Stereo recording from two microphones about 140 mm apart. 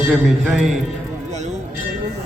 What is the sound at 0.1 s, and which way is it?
Speech, 5° right (ahead or behind).